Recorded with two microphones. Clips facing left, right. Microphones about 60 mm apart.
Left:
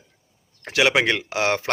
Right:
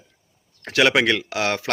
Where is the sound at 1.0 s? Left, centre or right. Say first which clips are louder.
Right 1 dB; left.